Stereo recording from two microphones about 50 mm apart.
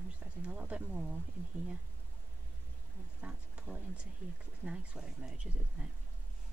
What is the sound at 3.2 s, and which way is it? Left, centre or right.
Speech, centre.